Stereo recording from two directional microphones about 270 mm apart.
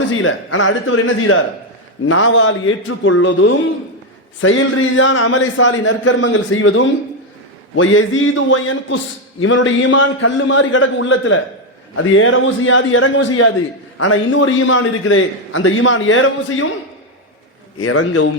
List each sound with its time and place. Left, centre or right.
0.1 s a man's voice: left
17.8 s a man's voice: left